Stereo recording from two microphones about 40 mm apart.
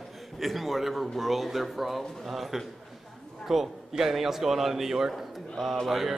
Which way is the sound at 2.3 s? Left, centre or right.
Centre.